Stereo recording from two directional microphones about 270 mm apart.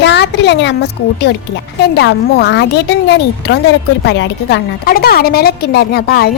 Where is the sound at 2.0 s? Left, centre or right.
Left.